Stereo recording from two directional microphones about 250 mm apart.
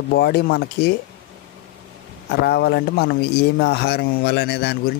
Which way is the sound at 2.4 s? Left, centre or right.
Left.